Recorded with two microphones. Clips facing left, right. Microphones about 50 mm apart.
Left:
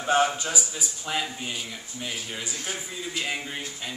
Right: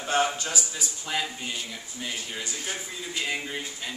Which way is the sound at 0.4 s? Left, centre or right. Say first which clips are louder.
Left 1 dB; centre.